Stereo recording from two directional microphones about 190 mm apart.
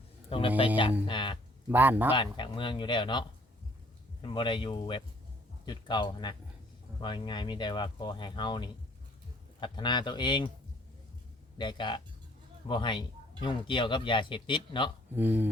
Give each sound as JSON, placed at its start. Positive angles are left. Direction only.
{"t": 0.3, "sound": "speech", "side_deg": 30}
{"t": 1.7, "sound": "speech", "side_deg": -10}
{"t": 2.1, "sound": "speech", "side_deg": 25}
{"t": 11.5, "sound": "speech", "side_deg": 25}
{"t": 15.1, "sound": "speech", "side_deg": -10}